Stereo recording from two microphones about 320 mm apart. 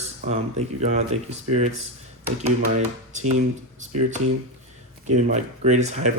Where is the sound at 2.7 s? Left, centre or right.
Right.